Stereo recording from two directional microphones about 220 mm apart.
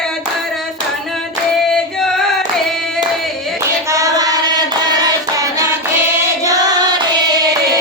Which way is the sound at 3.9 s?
15° right (ahead or behind).